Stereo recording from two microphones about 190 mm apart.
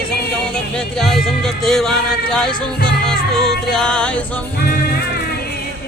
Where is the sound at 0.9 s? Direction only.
Centre (ahead or behind).